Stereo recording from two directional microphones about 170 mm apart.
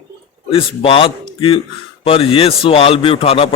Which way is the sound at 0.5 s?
35° left (ahead or behind).